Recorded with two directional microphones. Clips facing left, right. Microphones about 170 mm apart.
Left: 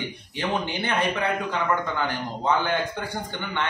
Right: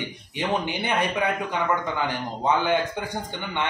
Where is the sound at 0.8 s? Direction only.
15° right (ahead or behind).